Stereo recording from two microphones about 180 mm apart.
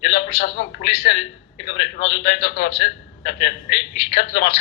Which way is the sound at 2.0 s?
65° left (ahead or behind).